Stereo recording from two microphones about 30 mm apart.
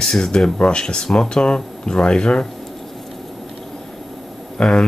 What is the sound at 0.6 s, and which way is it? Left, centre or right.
Speech, left.